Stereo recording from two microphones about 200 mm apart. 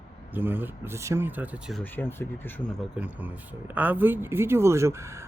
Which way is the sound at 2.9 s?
5° right (ahead or behind).